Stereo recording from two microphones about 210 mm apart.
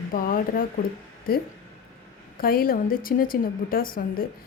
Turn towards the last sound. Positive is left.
turn(degrees=40)  # may be behind; listen again after turning